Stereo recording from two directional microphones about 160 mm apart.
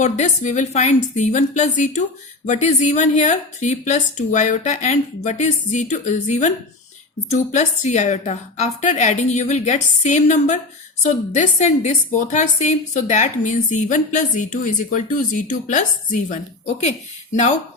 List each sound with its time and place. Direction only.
0.0 s a woman's voice: 50° left (ahead or behind)